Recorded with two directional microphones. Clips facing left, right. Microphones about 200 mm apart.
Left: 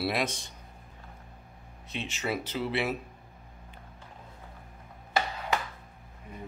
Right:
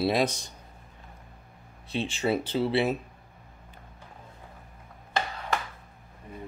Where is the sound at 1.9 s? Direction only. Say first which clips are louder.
Right 6 dB; 30° right (ahead or behind).